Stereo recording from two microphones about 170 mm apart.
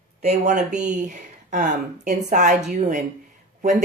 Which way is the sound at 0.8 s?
45° right (ahead or behind).